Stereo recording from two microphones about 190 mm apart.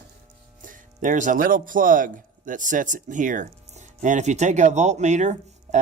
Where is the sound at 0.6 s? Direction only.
45° right (ahead or behind).